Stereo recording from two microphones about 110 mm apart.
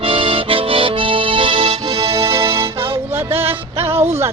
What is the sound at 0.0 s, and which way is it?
Accordion, 55° right (ahead or behind).